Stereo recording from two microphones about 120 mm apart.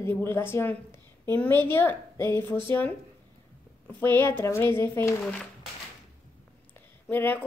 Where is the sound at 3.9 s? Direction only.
20° left (ahead or behind).